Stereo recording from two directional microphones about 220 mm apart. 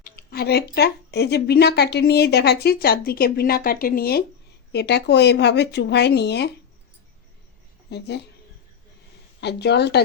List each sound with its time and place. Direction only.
0.0 s speech: 45° left (ahead or behind)
7.9 s speech: 50° left (ahead or behind)
9.4 s speech: 50° left (ahead or behind)